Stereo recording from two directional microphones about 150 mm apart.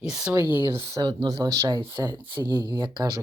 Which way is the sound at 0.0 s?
5° right (ahead or behind).